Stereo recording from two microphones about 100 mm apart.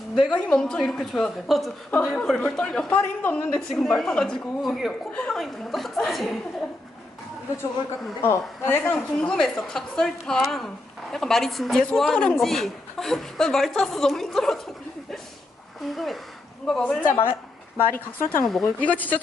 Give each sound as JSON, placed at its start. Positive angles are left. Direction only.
{"t": 0.2, "sound": "speech", "side_deg": 10}
{"t": 5.1, "sound": "speech", "side_deg": 10}
{"t": 5.4, "sound": "speech", "side_deg": 0}
{"t": 8.2, "sound": "a woman's voice", "side_deg": 20}
{"t": 9.3, "sound": "speech", "side_deg": 5}
{"t": 15.8, "sound": "speech", "side_deg": 0}
{"t": 17.0, "sound": "a woman's voice", "side_deg": 20}